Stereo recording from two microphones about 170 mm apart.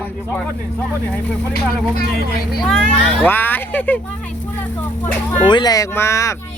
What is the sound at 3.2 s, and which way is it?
Speech, 10° left (ahead or behind).